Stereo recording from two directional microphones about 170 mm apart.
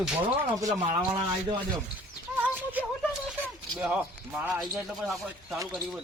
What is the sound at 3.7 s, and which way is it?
Speech, 5° right (ahead or behind).